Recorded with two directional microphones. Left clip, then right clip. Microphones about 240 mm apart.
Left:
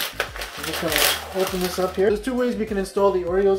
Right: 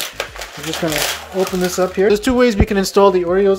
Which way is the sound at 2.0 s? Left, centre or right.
Right.